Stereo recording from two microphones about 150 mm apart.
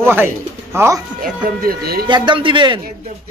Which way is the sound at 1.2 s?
75° right (ahead or behind).